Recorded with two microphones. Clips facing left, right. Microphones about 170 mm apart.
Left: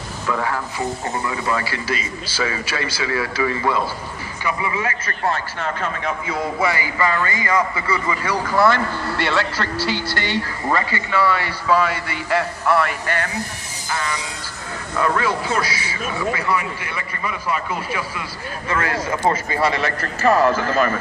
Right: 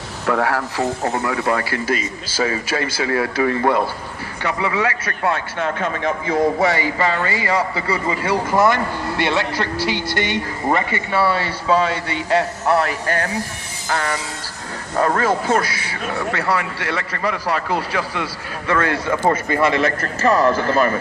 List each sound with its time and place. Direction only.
0.3 s speech: 70° right (ahead or behind); by 3.8 s 55° right (ahead or behind)
4.4 s a man's voice: 75° right (ahead or behind); by 6.4 s 55° right (ahead or behind)
7.2 s a man's voice: 35° right (ahead or behind)
13.8 s a man's voice: 60° right (ahead or behind)
14.9 s speech: 45° right (ahead or behind); by 18.8 s 65° right (ahead or behind)
19.0 s a man's voice: 55° right (ahead or behind); by 21.0 s 35° right (ahead or behind)